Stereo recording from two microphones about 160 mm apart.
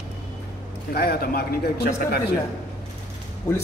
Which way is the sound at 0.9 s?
75° left (ahead or behind).